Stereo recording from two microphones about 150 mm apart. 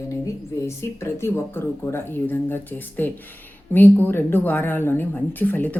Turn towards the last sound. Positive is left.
turn(degrees=10)  # may be behind; listen again after turning